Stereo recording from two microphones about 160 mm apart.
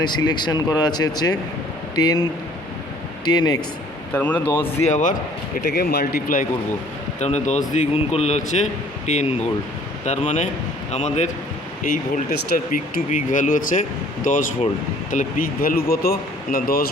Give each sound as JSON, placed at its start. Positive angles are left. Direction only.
{"t": 0.0, "sound": "speech", "side_deg": 25}
{"t": 3.2, "sound": "speech", "side_deg": 25}
{"t": 4.1, "sound": "speech", "side_deg": 10}
{"t": 4.8, "sound": "speech", "side_deg": 50}
{"t": 5.6, "sound": "speech", "side_deg": 90}
{"t": 7.2, "sound": "speech", "side_deg": 45}
{"t": 11.8, "sound": "speech", "side_deg": 65}